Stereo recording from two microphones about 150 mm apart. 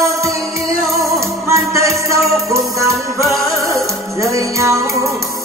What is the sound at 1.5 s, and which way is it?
Music, 20° right (ahead or behind).